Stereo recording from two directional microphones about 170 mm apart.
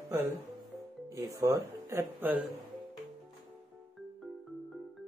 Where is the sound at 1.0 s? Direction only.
20° right (ahead or behind).